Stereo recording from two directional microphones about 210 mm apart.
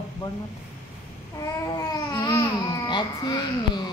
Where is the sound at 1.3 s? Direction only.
15° left (ahead or behind).